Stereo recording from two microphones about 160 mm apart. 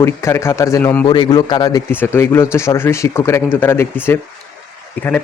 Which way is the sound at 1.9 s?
15° left (ahead or behind).